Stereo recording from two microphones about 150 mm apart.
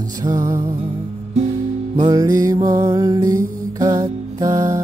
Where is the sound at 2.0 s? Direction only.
25° right (ahead or behind).